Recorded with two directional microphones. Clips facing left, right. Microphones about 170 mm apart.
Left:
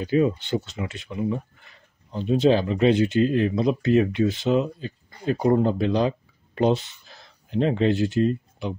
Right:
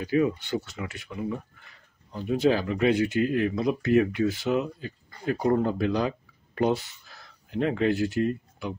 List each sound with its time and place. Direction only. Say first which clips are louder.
0.0 s speech: left 3 dB; 25° left (ahead or behind)